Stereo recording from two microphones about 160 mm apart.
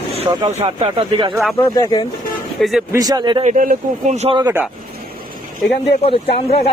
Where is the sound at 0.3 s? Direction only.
20° right (ahead or behind).